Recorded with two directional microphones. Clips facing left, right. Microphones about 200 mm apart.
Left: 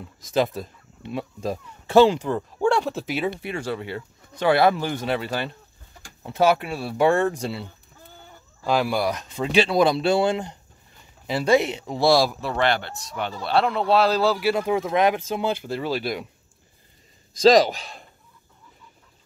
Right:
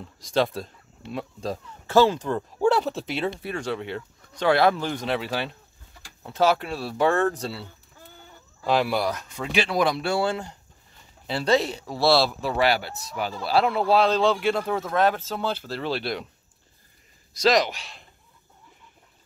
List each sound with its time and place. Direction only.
0.0 s speech: 5° left (ahead or behind)
2.6 s speech: 5° right (ahead or behind)
6.2 s speech: 10° left (ahead or behind)
8.6 s speech: centre (ahead or behind)
9.1 s speech: 20° left (ahead or behind)
12.4 s speech: 5° right (ahead or behind)
17.4 s speech: 35° left (ahead or behind)